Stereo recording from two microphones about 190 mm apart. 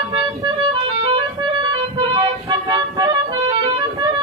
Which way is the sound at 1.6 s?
25° right (ahead or behind).